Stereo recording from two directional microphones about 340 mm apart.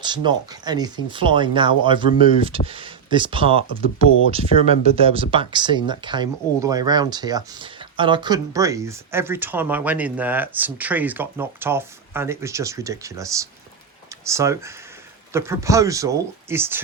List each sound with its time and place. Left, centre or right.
0.0 s speech: centre